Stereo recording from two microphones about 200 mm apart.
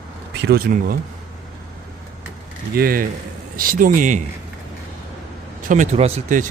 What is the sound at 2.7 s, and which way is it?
Speech, 50° right (ahead or behind).